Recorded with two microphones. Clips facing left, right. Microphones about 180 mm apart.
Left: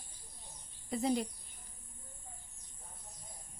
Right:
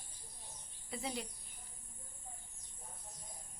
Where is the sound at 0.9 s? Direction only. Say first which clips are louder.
Left 10 dB; 40° left (ahead or behind).